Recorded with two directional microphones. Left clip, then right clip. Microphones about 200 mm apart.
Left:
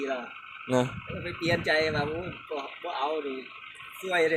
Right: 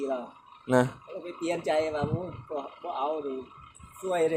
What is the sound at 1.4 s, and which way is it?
Speech, 30° right (ahead or behind).